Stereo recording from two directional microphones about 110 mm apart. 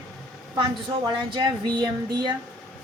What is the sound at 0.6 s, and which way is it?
Speech, 45° right (ahead or behind).